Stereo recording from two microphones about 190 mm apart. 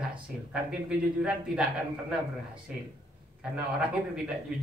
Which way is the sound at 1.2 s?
5° right (ahead or behind).